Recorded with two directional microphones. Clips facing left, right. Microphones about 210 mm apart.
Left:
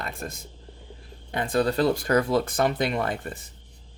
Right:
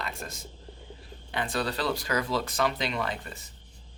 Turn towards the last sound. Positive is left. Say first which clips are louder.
# left 5 dB
turn(degrees=50)  # may be behind; listen again after turning